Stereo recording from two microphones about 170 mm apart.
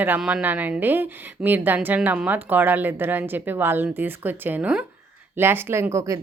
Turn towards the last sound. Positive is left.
turn(degrees=-15)  # may be behind; listen again after turning